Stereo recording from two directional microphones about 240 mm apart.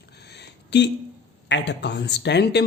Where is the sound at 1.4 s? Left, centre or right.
Left.